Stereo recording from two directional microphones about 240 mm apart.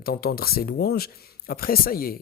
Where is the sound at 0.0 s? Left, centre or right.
Left.